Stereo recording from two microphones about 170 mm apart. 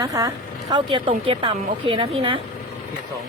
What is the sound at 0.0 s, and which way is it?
Speech, 20° right (ahead or behind).